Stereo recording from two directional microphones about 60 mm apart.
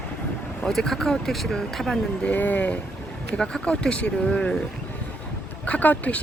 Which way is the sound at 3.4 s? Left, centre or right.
Centre.